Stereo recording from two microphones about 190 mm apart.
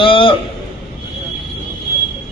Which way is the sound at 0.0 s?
25° left (ahead or behind).